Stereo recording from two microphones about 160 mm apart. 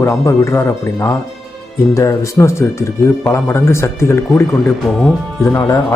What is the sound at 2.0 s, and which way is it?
Speech, 20° left (ahead or behind).